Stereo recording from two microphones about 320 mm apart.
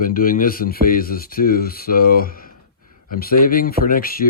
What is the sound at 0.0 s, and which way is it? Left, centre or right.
Speech, left.